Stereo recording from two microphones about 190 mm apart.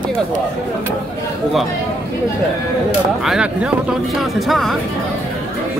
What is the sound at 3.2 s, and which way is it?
Speech, 5° right (ahead or behind).